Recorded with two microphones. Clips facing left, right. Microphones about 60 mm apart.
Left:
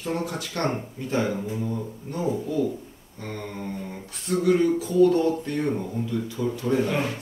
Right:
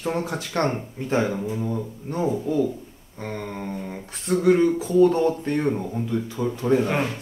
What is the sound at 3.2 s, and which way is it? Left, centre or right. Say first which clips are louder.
Speech: right 2 dB; right.